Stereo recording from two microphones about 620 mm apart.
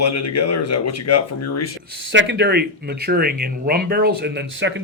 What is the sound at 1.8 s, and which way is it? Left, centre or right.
Speech, centre.